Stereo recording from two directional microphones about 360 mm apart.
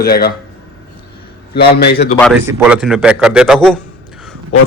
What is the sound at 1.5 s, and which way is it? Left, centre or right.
Speech, left.